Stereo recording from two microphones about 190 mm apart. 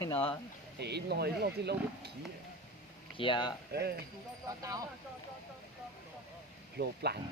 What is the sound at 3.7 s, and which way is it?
Speech, 55° right (ahead or behind).